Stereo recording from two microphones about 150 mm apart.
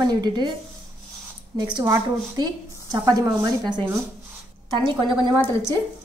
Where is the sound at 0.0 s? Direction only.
25° right (ahead or behind).